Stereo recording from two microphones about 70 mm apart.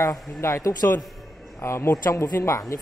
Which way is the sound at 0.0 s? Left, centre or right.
Left.